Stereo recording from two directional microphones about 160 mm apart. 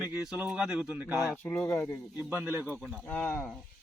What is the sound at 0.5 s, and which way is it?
Speech, 5° right (ahead or behind).